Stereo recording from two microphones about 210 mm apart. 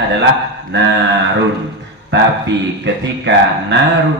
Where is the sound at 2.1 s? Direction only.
55° right (ahead or behind).